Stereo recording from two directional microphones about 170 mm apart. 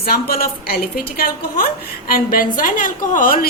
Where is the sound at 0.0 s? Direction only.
60° left (ahead or behind).